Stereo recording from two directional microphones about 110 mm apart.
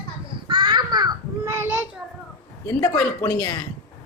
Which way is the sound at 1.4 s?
20° right (ahead or behind).